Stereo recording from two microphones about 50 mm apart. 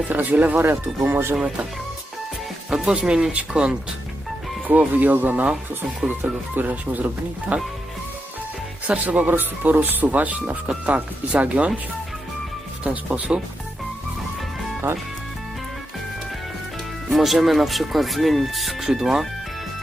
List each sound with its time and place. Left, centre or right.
0.1 s speech: right
0.5 s speech: right
2.6 s speech: centre
4.9 s speech: right
9.0 s speech: right
12.8 s speech: right
17.1 s speech: centre